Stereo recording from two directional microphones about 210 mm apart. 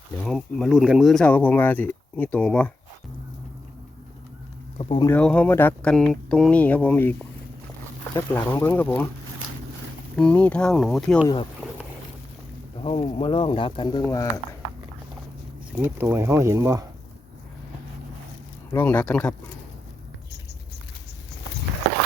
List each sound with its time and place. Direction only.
0.2 s speech: centre (ahead or behind)
4.8 s speech: 25° left (ahead or behind)
5.0 s speech: 5° left (ahead or behind)
10.2 s speech: 5° left (ahead or behind)
12.8 s speech: 25° left (ahead or behind)
15.7 s speech: 10° right (ahead or behind)
18.7 s speech: 10° left (ahead or behind)